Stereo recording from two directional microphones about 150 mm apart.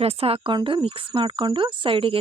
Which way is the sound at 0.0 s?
40° right (ahead or behind).